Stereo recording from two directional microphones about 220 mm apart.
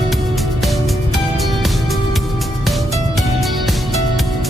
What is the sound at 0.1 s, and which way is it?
Music, centre (ahead or behind).